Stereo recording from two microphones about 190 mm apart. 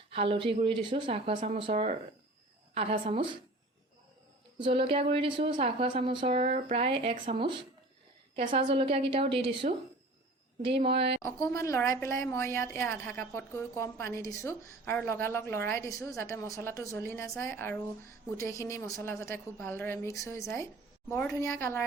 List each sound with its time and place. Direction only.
0.1 s speech: 30° right (ahead or behind)
4.5 s speech: 30° right (ahead or behind)
10.8 s speech: 30° right (ahead or behind)
11.2 s a woman's voice: 15° left (ahead or behind)